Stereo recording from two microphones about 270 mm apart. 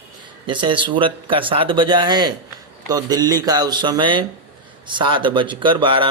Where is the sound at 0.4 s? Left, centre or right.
Centre.